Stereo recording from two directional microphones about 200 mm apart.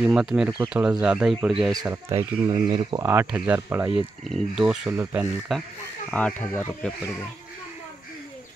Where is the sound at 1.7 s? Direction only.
15° right (ahead or behind).